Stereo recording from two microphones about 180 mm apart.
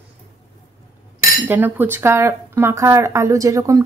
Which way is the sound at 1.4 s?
10° right (ahead or behind).